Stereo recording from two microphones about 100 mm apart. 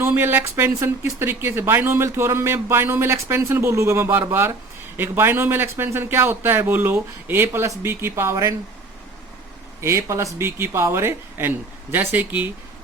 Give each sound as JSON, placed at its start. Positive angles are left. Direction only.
{"t": 0.0, "sound": "speech", "side_deg": -20}
{"t": 9.8, "sound": "speech", "side_deg": -30}